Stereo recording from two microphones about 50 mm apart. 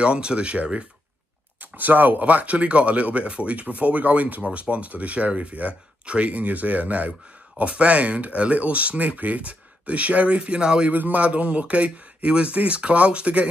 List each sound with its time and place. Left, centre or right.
0.0 s speech: centre
1.6 s speech: right; by 10.9 s centre
10.9 s speech: right